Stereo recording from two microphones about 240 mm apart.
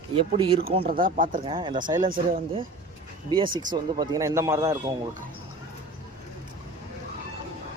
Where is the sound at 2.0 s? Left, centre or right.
Right.